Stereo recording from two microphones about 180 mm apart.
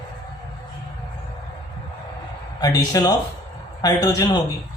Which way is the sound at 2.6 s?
20° left (ahead or behind).